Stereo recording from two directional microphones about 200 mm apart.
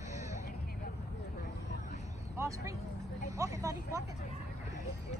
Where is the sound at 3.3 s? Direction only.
15° right (ahead or behind).